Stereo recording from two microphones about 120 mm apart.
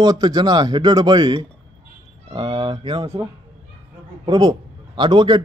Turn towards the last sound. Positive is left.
turn(degrees=-35)  # may be behind; listen again after turning